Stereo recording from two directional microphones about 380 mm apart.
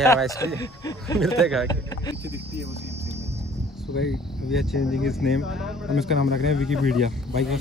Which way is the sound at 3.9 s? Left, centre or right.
Left.